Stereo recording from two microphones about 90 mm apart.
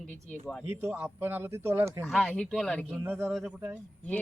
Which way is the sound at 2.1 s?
5° left (ahead or behind).